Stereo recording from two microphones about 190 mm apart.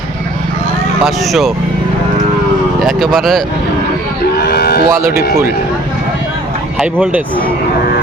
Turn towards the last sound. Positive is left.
turn(degrees=-10)  # may be behind; listen again after turning